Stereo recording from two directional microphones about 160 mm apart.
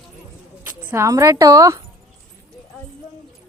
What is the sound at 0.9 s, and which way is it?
Speech, 20° right (ahead or behind).